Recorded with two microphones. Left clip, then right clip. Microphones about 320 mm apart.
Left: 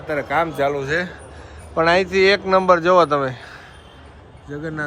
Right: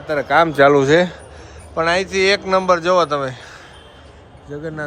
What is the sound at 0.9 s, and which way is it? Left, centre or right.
Speech, centre.